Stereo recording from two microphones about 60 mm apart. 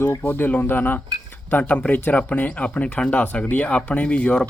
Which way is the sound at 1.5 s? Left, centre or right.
Left.